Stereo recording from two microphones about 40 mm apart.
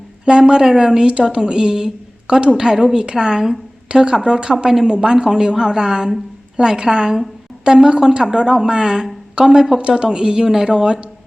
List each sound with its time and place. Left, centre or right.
0.3 s a woman's voice: centre